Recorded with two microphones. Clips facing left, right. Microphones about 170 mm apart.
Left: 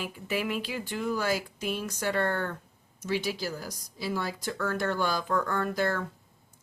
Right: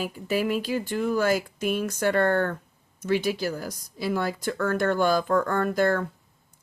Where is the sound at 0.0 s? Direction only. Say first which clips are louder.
Right 5 dB; 40° right (ahead or behind).